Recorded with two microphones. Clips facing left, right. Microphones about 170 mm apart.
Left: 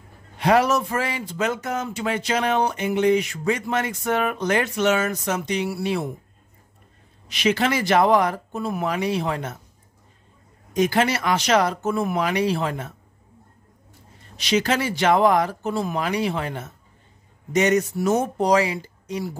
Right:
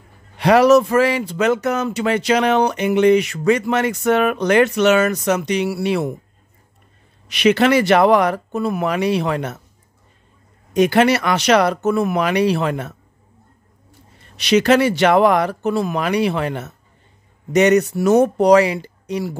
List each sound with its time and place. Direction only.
0.4 s speech: 80° right
7.2 s speech: 70° right (ahead or behind)
10.7 s speech: 70° right (ahead or behind)
14.3 s speech: 70° right (ahead or behind)